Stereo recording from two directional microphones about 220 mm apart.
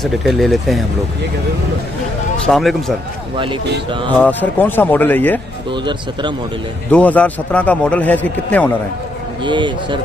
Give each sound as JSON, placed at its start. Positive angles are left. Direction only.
{"t": 0.0, "sound": "speech", "side_deg": 0}
{"t": 2.3, "sound": "speech", "side_deg": 0}
{"t": 4.2, "sound": "a man's voice", "side_deg": 10}
{"t": 5.7, "sound": "speech", "side_deg": -20}
{"t": 6.9, "sound": "a man's voice", "side_deg": 5}
{"t": 9.4, "sound": "speech", "side_deg": -20}